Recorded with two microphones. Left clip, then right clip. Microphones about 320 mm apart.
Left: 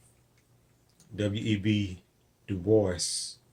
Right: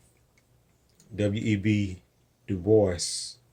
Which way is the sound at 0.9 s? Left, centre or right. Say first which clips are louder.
Right 3 dB; right.